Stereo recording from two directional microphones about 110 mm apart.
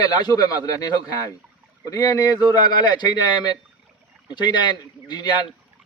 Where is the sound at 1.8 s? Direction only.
35° left (ahead or behind).